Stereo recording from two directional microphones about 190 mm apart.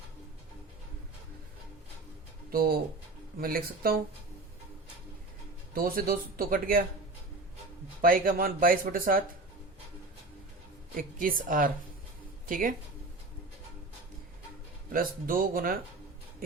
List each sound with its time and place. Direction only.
2.5 s speech: 50° right (ahead or behind)
5.7 s speech: 50° right (ahead or behind)
8.0 s speech: 50° right (ahead or behind)
10.9 s speech: 45° right (ahead or behind)
14.9 s speech: 50° right (ahead or behind)